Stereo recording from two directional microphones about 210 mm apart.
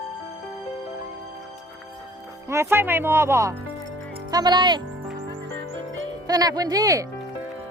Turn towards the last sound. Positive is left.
turn(degrees=-15)  # may be behind; listen again after turning